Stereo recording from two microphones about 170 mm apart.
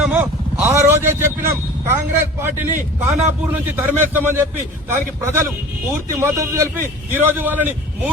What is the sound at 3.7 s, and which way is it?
Speech, 10° right (ahead or behind).